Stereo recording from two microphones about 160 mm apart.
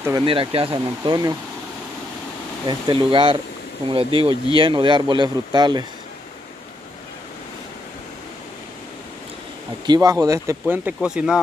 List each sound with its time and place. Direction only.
0.2 s speech: 35° right (ahead or behind)
2.6 s speech: 30° right (ahead or behind)
9.8 s speech: 25° right (ahead or behind); by 11.3 s 5° right (ahead or behind)